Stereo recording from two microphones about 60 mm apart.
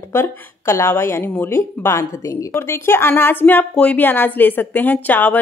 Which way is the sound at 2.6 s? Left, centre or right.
Left.